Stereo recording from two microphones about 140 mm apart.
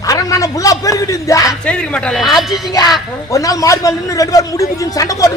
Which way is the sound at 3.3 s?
25° left (ahead or behind).